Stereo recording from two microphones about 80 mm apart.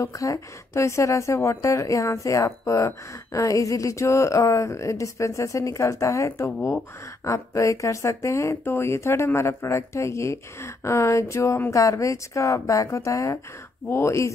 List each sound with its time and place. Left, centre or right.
0.0 s speech: left